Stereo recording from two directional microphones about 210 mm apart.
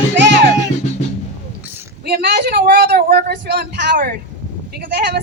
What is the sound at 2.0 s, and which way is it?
Speech, 50° right (ahead or behind).